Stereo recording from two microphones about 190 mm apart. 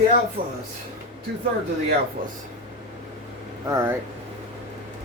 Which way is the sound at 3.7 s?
15° right (ahead or behind).